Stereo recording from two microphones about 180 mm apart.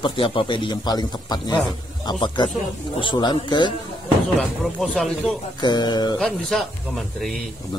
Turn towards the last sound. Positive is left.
turn(degrees=0)  # may be behind; listen again after turning